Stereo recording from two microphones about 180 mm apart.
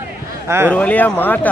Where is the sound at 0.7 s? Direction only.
10° left (ahead or behind).